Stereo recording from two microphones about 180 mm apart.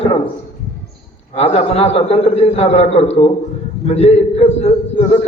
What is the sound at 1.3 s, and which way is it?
A man's voice, 35° left (ahead or behind).